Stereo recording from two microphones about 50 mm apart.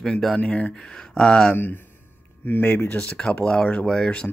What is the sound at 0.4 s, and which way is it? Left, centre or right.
Speech, left.